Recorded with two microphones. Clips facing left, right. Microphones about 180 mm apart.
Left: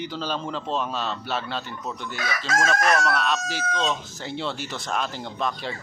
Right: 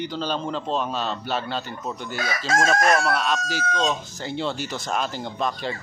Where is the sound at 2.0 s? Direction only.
35° right (ahead or behind).